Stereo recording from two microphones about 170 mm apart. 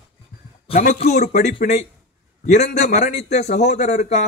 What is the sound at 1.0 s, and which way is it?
A man's voice, 40° left (ahead or behind).